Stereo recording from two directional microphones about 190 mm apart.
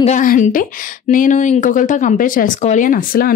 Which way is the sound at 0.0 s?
40° left (ahead or behind).